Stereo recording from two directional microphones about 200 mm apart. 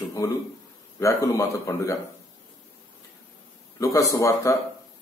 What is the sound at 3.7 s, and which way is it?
Speech, 15° left (ahead or behind).